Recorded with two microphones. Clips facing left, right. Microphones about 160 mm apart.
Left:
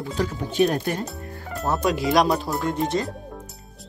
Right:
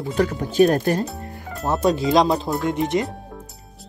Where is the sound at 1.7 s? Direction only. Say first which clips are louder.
Right 3 dB; 25° right (ahead or behind).